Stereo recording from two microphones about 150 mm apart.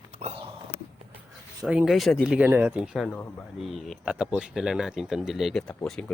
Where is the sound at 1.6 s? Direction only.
Centre (ahead or behind).